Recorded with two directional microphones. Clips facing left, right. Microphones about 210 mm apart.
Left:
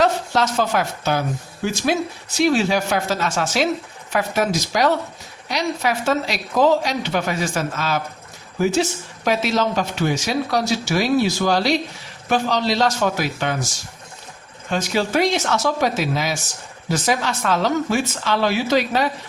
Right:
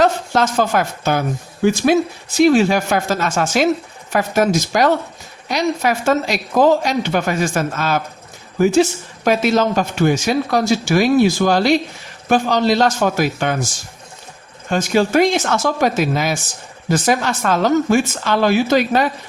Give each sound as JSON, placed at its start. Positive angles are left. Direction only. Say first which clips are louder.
{"t": 0.0, "sound": "speech", "louder": "right 3 dB", "side_deg": -50}
{"t": 14.7, "sound": "speech", "louder": "right 5 dB", "side_deg": -50}